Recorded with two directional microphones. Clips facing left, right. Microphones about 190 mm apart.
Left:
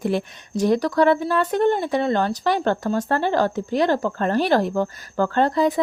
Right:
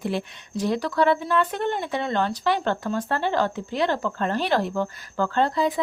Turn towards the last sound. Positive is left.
turn(degrees=45)  # may be behind; listen again after turning